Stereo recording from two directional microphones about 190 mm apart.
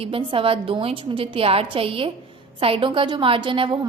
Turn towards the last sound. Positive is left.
turn(degrees=-25)  # may be behind; listen again after turning